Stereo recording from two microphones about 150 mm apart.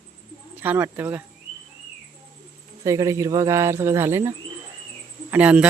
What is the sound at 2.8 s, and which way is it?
Speech, 20° right (ahead or behind).